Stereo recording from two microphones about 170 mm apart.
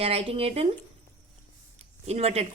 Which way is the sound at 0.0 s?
35° right (ahead or behind).